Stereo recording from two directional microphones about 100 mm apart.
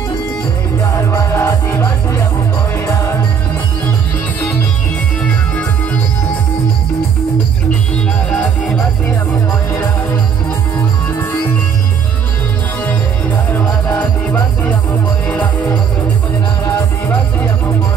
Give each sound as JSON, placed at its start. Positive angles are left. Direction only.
{"t": 0.9, "sound": "music", "side_deg": 30}
{"t": 8.3, "sound": "music", "side_deg": 10}
{"t": 13.6, "sound": "music", "side_deg": 20}